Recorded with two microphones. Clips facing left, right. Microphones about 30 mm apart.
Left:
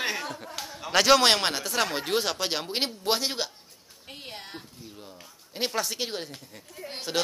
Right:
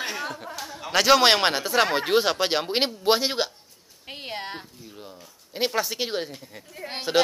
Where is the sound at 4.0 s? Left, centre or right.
Right.